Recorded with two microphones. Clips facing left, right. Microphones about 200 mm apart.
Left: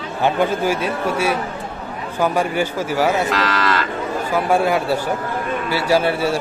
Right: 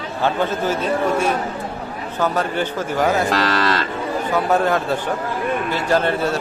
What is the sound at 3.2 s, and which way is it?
Cattle, 30° right (ahead or behind).